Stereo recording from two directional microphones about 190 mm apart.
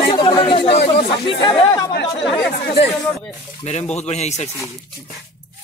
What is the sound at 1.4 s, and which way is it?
Speech, 25° left (ahead or behind).